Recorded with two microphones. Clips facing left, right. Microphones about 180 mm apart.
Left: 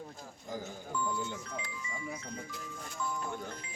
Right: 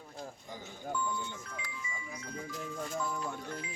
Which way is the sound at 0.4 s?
45° left (ahead or behind).